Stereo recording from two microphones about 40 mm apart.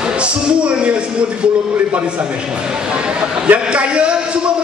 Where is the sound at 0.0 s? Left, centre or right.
Right.